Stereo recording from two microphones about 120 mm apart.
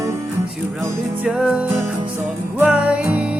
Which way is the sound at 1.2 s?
5° right (ahead or behind).